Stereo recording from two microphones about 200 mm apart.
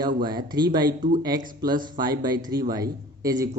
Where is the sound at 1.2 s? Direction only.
20° right (ahead or behind).